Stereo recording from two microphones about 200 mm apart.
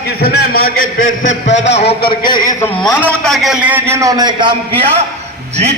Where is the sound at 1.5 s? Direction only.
60° left (ahead or behind).